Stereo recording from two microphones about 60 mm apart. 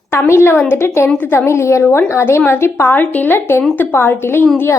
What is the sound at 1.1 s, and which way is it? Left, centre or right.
Speech, left.